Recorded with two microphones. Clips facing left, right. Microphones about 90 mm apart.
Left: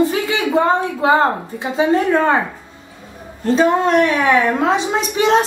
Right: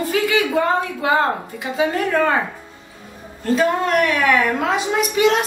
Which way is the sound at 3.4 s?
25° left (ahead or behind).